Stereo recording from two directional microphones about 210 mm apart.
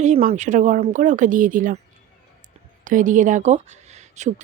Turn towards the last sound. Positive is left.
turn(degrees=-35)  # may be behind; listen again after turning